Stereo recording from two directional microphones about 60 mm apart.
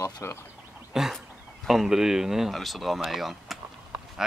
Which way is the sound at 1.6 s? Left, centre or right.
Centre.